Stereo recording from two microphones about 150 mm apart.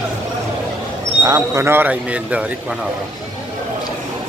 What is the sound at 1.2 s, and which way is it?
Speech, 25° right (ahead or behind).